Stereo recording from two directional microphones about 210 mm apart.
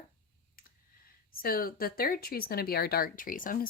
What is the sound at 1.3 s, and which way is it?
A woman's voice, 45° left (ahead or behind).